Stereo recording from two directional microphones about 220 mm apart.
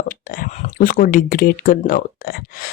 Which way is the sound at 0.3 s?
40° left (ahead or behind).